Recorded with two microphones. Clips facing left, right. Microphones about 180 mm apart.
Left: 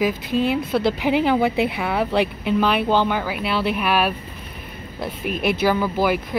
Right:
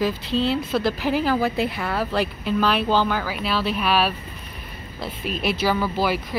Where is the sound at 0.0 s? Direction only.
15° left (ahead or behind).